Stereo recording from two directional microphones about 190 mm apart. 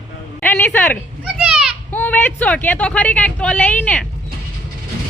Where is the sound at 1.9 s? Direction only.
10° left (ahead or behind).